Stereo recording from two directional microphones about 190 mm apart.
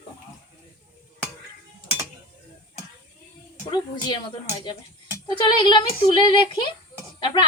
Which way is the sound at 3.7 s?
25° left (ahead or behind).